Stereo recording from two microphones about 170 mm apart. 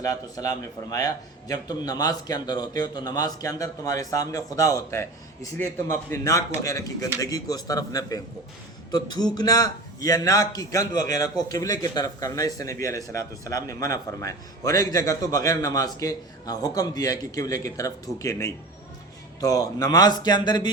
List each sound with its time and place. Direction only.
0.0 s a man's voice: 20° left (ahead or behind)